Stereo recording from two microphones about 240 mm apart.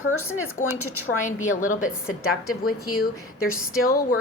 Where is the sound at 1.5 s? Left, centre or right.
Left.